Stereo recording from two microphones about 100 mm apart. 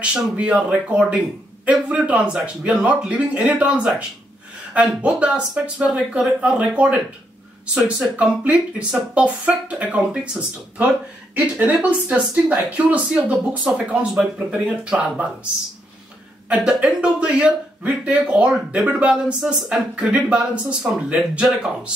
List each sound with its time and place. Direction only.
0.0 s a man's voice: 10° right (ahead or behind)
16.4 s a man's voice: 10° right (ahead or behind)